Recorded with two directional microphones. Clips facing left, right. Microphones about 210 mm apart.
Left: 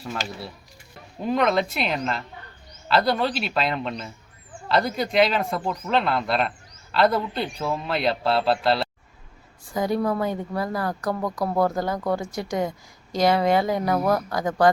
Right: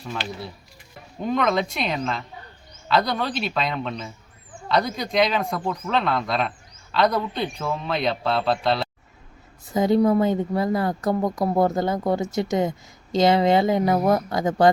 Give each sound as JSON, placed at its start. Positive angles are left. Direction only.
{"t": 1.2, "sound": "a man's voice", "side_deg": 5}
{"t": 9.6, "sound": "speech", "side_deg": -20}